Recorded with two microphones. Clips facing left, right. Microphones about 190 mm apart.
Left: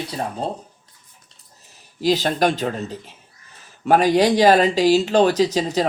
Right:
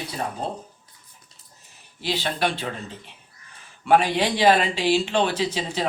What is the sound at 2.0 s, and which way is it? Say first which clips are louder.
Speech: left 7 dB; 40° left (ahead or behind).